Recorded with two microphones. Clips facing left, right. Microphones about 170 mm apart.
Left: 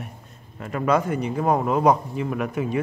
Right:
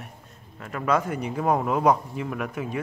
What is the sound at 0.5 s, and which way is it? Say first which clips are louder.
Speech: left 3 dB; 5° left (ahead or behind).